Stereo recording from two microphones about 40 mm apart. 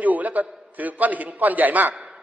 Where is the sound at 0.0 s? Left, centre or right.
Right.